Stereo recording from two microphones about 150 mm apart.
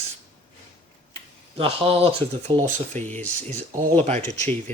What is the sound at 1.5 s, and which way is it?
Speech, 40° right (ahead or behind).